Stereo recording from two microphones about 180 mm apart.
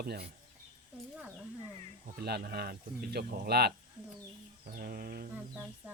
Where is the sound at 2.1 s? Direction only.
60° right (ahead or behind).